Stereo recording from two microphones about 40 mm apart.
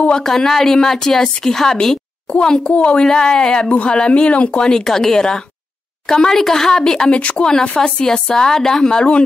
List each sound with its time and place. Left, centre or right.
0.1 s a woman's voice: centre
3.0 s speech: centre
4.6 s a woman's voice: centre
7.1 s speech: left
8.0 s a woman's voice: centre